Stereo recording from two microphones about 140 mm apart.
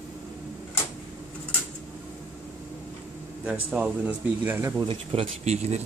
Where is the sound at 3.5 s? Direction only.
10° right (ahead or behind).